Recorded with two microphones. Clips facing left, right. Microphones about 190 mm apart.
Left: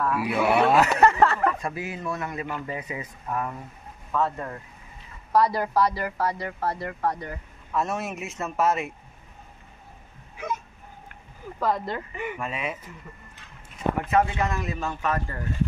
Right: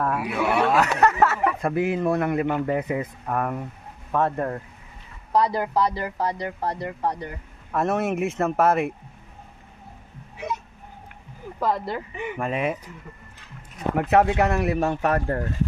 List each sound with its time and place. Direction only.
0.0 s speech: 45° right (ahead or behind)
0.3 s speech: 5° left (ahead or behind)
1.6 s speech: 55° right (ahead or behind)
5.3 s speech: 20° right (ahead or behind)
7.7 s speech: 55° right (ahead or behind)
11.6 s speech: 10° right (ahead or behind)
12.4 s speech: 50° right (ahead or behind)
13.9 s speech: 70° right (ahead or behind)